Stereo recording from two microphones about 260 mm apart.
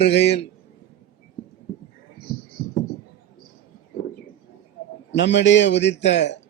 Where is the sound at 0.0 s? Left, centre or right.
Left.